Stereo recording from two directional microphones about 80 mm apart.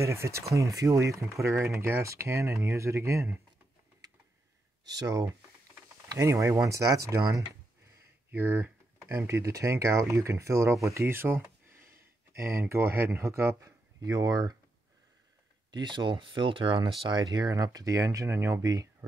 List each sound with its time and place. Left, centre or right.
0.0 s speech: right
4.8 s speech: right
8.3 s speech: right
15.7 s speech: right